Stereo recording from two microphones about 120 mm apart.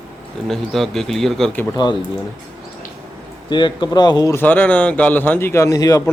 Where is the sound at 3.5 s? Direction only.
40° left (ahead or behind).